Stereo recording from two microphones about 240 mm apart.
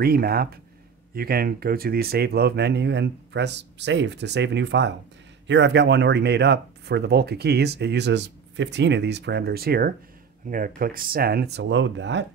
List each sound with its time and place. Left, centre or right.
0.0 s speech: right